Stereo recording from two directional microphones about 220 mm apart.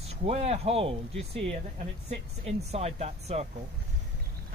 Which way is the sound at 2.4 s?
30° right (ahead or behind).